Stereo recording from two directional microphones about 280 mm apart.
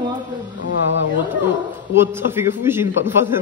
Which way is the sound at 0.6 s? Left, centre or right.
Left.